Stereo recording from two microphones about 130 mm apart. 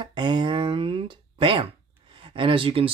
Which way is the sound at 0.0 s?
35° right (ahead or behind).